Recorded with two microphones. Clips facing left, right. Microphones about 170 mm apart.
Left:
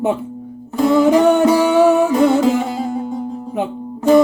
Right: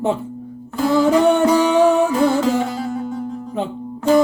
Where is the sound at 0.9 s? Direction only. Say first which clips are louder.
Left 2 dB; 20° left (ahead or behind).